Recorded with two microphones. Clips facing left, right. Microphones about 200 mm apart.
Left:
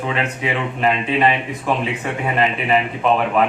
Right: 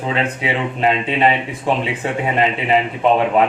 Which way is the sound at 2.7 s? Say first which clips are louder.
Right 3 dB; 25° right (ahead or behind).